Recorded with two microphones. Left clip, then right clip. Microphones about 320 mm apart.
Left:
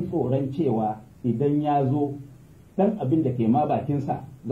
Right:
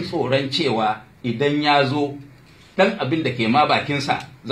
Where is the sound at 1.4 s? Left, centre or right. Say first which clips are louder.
Right 6 dB; right.